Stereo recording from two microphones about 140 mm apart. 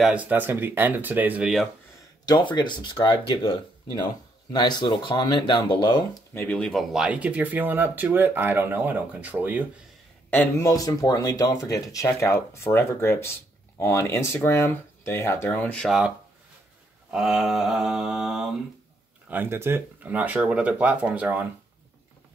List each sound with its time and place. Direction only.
0.0 s speech: 10° right (ahead or behind)
2.2 s speech: 30° left (ahead or behind)
6.3 s speech: 10° left (ahead or behind); by 9.7 s 10° right (ahead or behind)
10.3 s speech: 15° left (ahead or behind)
10.7 s speech: 25° left (ahead or behind); by 16.0 s 5° left (ahead or behind)
17.1 s mantra: 5° right (ahead or behind)
19.2 s speech: 15° right (ahead or behind)